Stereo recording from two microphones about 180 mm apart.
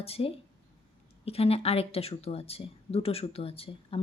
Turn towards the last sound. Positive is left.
turn(degrees=30)  # may be behind; listen again after turning